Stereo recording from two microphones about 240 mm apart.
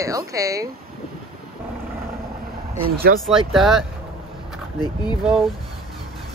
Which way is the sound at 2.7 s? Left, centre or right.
Right.